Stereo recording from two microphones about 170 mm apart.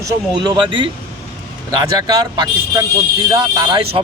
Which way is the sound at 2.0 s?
25° right (ahead or behind).